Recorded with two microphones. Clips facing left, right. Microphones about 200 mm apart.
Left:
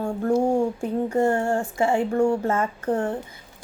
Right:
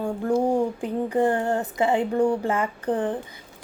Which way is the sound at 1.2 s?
20° right (ahead or behind).